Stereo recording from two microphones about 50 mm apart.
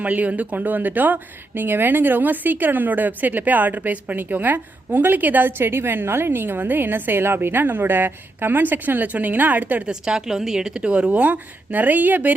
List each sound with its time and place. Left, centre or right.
0.0 s speech: right
9.9 s speech: centre
11.1 s speech: right